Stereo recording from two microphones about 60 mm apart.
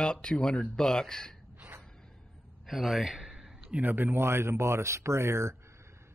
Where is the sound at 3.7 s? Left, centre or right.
Right.